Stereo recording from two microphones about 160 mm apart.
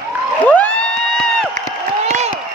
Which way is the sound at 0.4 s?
10° left (ahead or behind).